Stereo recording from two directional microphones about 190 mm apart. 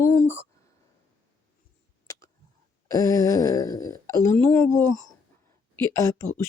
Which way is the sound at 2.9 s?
15° left (ahead or behind).